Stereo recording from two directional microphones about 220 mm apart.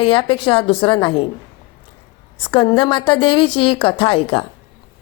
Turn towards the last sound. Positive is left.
turn(degrees=25)  # may be behind; listen again after turning